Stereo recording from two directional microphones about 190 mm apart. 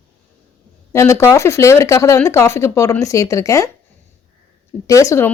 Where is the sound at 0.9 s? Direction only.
15° left (ahead or behind).